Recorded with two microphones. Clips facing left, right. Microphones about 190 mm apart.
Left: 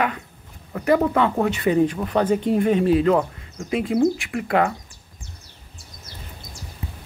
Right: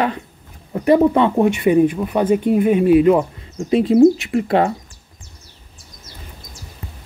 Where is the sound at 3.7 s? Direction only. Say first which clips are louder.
Right 8 dB; 25° right (ahead or behind).